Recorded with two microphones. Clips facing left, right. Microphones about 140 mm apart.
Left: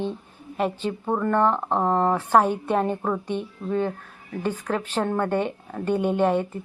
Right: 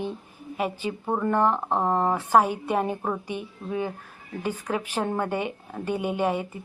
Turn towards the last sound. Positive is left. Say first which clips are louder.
# left 4 dB
turn(degrees=-5)  # may be behind; listen again after turning